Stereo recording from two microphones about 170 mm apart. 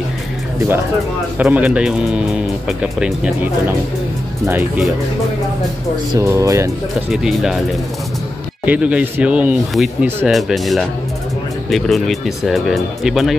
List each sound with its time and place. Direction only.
1.4 s speech: 10° right (ahead or behind)
6.1 s speech: 15° right (ahead or behind)
7.1 s speech: centre (ahead or behind)
8.6 s speech: 5° right (ahead or behind)